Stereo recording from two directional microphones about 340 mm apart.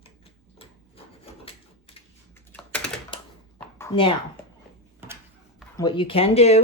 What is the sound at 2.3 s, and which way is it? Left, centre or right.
Typing, centre.